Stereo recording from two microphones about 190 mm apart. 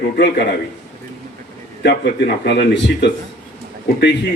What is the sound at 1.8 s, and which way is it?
A man's voice, 60° left (ahead or behind).